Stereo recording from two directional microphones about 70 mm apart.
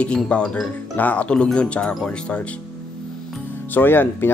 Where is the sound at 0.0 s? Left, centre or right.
Centre.